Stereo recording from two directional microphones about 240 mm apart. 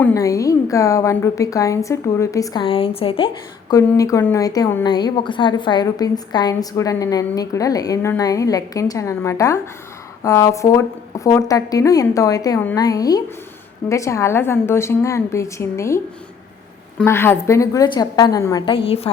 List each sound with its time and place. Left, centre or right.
0.0 s a woman's voice: centre
17.0 s a woman's voice: centre